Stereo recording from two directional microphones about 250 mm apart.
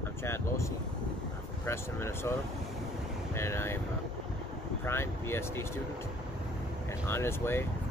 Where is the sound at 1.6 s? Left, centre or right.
Centre.